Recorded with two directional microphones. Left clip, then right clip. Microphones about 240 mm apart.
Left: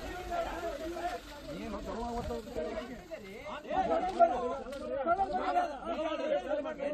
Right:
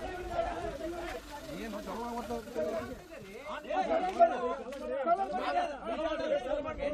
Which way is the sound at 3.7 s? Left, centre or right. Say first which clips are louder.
Even; centre.